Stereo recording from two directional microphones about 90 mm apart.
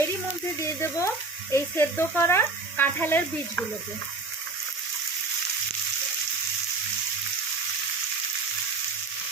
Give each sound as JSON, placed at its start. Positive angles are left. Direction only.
{"t": 0.6, "sound": "speech", "side_deg": 30}